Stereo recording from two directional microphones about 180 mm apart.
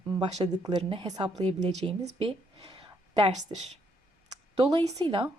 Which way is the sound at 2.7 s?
30° right (ahead or behind).